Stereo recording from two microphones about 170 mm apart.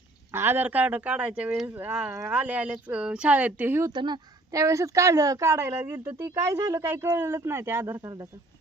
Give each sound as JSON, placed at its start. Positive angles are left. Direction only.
{"t": 0.3, "sound": "speech", "side_deg": -15}
{"t": 3.9, "sound": "speech", "side_deg": -25}